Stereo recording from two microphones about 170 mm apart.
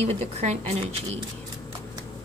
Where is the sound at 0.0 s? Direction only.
40° right (ahead or behind).